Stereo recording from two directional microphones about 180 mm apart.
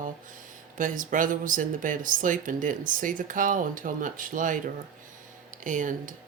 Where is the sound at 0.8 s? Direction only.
45° right (ahead or behind).